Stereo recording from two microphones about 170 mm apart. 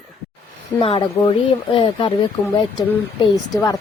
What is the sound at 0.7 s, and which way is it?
Speech, 10° left (ahead or behind).